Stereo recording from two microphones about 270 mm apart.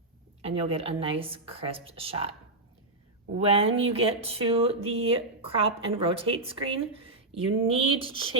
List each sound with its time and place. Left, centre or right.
0.4 s speech: right
3.3 s speech: right